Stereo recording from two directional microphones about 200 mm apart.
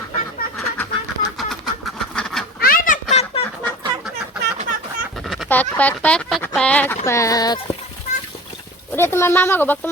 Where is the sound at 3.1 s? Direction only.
30° left (ahead or behind).